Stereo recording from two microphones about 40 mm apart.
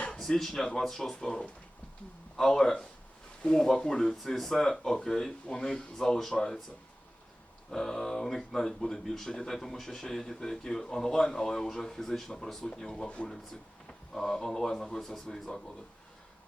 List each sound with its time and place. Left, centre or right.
0.2 s speech: centre
4.0 s speech: centre
7.7 s speech: centre